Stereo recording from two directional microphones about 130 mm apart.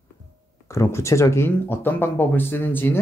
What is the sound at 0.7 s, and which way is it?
Speech, 20° left (ahead or behind).